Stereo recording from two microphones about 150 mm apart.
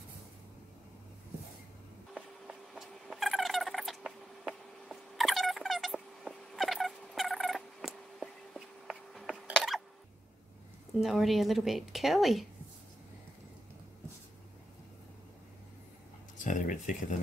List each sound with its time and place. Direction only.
2.1 s a sound: 5° right (ahead or behind)
11.0 s a woman's voice: centre (ahead or behind)
16.4 s speech: 60° left (ahead or behind)